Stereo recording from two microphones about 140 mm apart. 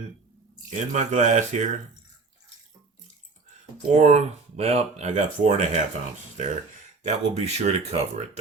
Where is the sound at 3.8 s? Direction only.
55° right (ahead or behind).